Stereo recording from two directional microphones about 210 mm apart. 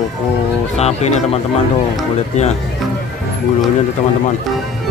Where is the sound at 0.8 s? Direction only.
30° left (ahead or behind).